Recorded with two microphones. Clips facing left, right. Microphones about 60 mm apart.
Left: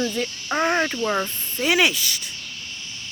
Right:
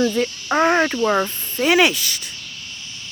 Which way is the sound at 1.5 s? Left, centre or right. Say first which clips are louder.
Right 4 dB; right.